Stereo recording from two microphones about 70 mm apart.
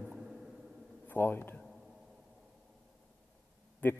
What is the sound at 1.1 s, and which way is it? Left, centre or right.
Speech, left.